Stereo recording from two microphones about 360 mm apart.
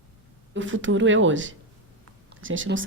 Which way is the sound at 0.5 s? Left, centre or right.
Right.